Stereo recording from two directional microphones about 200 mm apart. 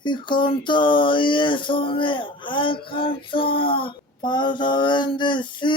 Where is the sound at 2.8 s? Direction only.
25° left (ahead or behind).